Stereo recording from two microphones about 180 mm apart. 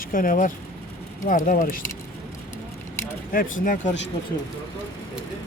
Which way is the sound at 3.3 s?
50° left (ahead or behind).